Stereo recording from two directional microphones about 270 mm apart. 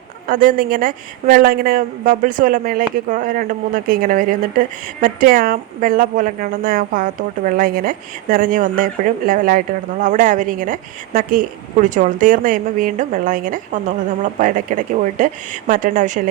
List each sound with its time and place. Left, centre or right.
0.3 s a woman's voice: right